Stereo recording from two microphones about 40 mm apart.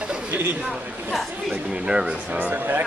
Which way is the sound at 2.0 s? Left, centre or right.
Right.